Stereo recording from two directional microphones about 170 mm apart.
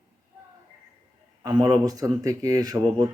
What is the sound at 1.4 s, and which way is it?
A man's voice, 25° right (ahead or behind).